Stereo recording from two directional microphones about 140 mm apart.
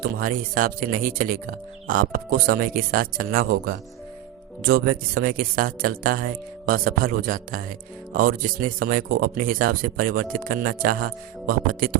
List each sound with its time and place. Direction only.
0.0 s speech: 85° right